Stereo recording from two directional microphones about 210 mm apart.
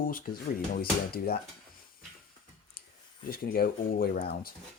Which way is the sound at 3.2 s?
45° left (ahead or behind).